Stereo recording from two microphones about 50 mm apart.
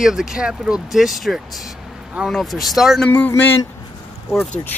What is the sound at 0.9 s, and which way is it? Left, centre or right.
Speech, centre.